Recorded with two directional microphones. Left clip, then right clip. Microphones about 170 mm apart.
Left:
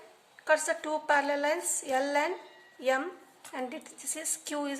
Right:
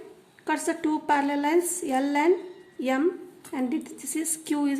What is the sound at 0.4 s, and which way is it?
A woman's voice, 20° right (ahead or behind).